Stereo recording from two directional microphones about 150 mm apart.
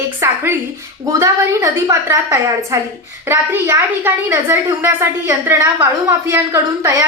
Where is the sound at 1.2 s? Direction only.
20° right (ahead or behind).